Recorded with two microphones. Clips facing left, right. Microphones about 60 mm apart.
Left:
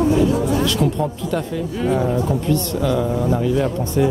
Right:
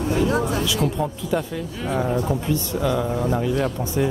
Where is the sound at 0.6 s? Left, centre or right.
Centre.